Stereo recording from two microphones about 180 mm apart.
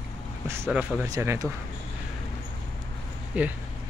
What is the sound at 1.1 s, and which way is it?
Speech, 15° right (ahead or behind).